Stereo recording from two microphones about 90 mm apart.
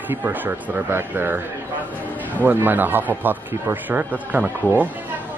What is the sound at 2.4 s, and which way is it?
Speech, 20° right (ahead or behind).